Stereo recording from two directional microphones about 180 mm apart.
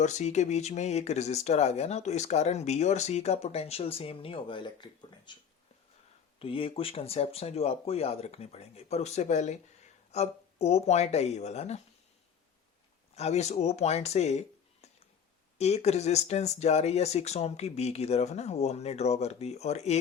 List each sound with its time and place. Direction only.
0.0 s speech: 40° left (ahead or behind); by 5.4 s 25° left (ahead or behind)
6.4 s speech: 30° left (ahead or behind)
13.1 s speech: 35° left (ahead or behind)